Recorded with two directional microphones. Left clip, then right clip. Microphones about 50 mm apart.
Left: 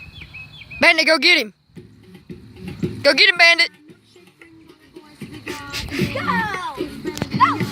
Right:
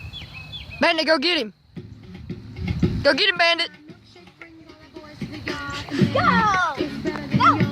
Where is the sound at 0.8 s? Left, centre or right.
Left.